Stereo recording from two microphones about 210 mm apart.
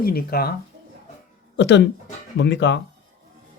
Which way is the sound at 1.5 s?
60° left (ahead or behind).